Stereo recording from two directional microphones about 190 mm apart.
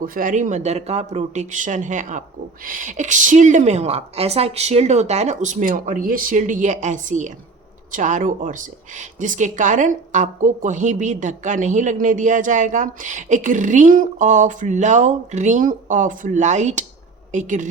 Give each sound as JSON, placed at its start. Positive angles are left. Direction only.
{"t": 0.0, "sound": "speech", "side_deg": -45}